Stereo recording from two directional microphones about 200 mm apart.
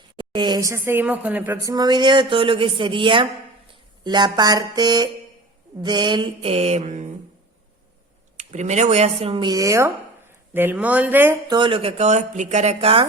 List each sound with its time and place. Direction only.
0.2 s a woman's voice: 25° right (ahead or behind)
8.4 s speech: 35° right (ahead or behind); by 11.3 s 10° right (ahead or behind)
11.4 s speech: 25° right (ahead or behind)